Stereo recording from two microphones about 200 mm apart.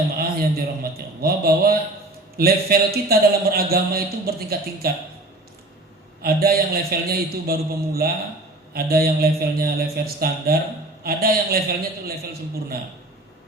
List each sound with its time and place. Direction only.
0.2 s a man's voice: 50° right (ahead or behind)
6.2 s a man's voice: 50° right (ahead or behind)